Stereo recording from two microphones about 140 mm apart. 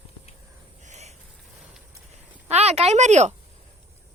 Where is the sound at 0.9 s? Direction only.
55° right (ahead or behind).